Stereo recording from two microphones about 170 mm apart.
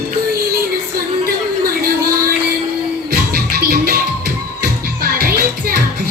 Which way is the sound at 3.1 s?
60° right (ahead or behind).